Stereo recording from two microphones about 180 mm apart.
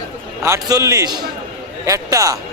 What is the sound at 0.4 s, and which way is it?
Speech, 15° right (ahead or behind).